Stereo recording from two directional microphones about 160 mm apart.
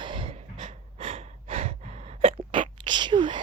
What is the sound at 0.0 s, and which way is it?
Gasp, 30° right (ahead or behind).